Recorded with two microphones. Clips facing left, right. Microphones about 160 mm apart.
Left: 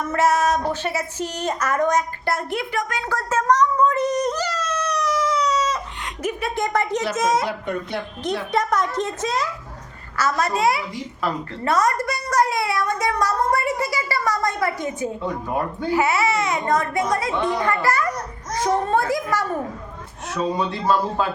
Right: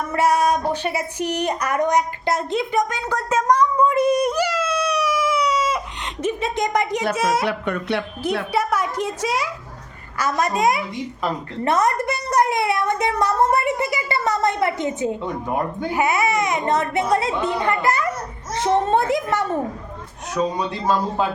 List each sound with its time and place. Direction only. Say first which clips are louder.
0.1 s a sound: right 1 dB; 10° right (ahead or behind)
6.2 s a woman's voice: right 2 dB; 20° right (ahead or behind)
7.4 s speech: right 3 dB; 70° right (ahead or behind)
8.5 s a woman's voice: left 3 dB; 10° right (ahead or behind)
20.6 s a woman's voice: left 1 dB; 15° right (ahead or behind)